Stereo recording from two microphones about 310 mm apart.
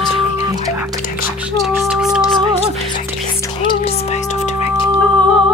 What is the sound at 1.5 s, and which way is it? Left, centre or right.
Music, centre.